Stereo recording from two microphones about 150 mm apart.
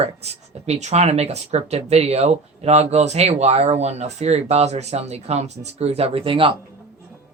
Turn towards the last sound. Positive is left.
turn(degrees=-40)  # may be behind; listen again after turning